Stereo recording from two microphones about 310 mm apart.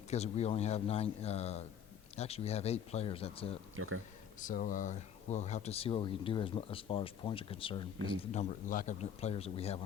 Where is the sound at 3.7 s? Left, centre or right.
Right.